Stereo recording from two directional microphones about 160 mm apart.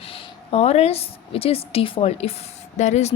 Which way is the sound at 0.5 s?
40° left (ahead or behind).